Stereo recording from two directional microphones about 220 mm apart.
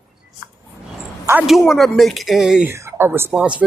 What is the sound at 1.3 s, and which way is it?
Speech, 5° right (ahead or behind).